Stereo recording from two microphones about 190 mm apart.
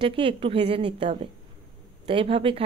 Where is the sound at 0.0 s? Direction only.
30° right (ahead or behind).